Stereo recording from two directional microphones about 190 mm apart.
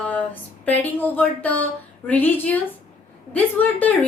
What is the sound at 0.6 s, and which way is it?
A woman's voice, 10° left (ahead or behind).